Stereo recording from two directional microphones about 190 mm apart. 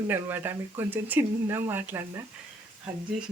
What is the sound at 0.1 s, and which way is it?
Speech, 10° right (ahead or behind).